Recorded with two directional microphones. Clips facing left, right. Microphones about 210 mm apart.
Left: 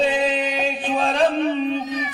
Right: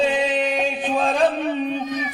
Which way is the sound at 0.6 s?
Centre (ahead or behind).